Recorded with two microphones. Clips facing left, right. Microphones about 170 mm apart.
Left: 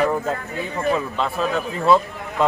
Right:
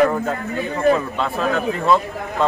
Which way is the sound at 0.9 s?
Centre (ahead or behind).